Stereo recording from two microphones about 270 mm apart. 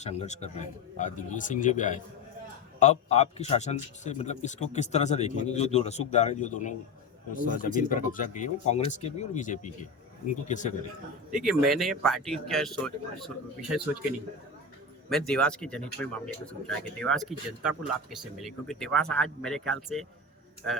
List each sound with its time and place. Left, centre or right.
0.0 s a man's voice: left
11.3 s speech: centre
15.3 s speech: centre